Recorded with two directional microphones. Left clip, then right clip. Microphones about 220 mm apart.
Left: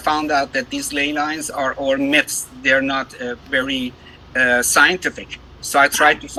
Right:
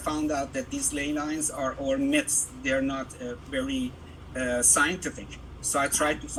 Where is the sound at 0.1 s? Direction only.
40° left (ahead or behind).